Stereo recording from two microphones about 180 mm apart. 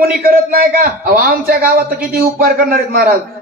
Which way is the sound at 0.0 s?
55° right (ahead or behind).